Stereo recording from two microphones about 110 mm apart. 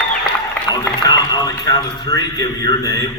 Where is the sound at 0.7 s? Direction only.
35° left (ahead or behind).